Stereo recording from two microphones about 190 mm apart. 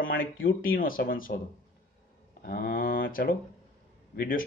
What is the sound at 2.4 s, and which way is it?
Speech, 50° left (ahead or behind).